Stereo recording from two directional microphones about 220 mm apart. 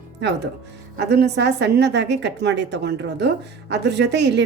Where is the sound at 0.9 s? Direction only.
50° right (ahead or behind).